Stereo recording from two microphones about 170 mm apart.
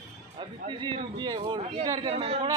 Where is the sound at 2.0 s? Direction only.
35° right (ahead or behind).